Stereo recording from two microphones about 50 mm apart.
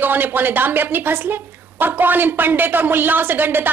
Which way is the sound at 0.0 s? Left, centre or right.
Right.